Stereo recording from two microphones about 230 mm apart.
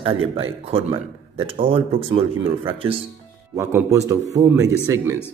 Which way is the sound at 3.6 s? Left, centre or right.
Centre.